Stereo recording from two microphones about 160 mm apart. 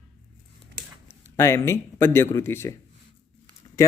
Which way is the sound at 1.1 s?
15° left (ahead or behind).